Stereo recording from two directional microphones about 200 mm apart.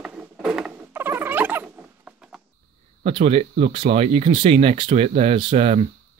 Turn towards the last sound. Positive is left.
turn(degrees=-30)  # may be behind; listen again after turning